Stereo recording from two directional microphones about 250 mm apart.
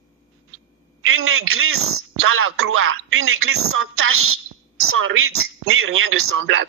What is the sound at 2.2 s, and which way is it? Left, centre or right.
A man's voice, right.